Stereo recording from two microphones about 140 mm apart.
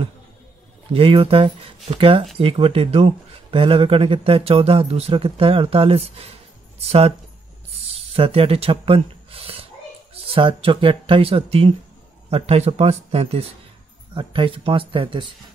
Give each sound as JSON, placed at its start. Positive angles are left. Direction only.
{"t": 0.9, "sound": "speech", "side_deg": -40}
{"t": 7.9, "sound": "a sound", "side_deg": -45}
{"t": 10.1, "sound": "speech", "side_deg": -40}